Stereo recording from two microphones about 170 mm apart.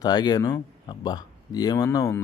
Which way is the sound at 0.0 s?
25° left (ahead or behind).